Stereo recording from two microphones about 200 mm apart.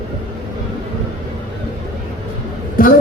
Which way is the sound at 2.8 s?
45° left (ahead or behind).